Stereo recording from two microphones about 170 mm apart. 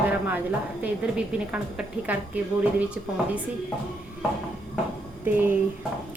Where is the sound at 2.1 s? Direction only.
10° right (ahead or behind).